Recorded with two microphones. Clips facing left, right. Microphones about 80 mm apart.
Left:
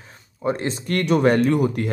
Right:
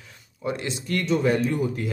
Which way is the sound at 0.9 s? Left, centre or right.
Left.